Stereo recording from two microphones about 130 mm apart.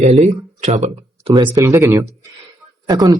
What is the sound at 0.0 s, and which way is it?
Speech, 60° right (ahead or behind).